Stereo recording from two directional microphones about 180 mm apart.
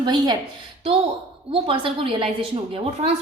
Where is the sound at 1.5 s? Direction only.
30° right (ahead or behind).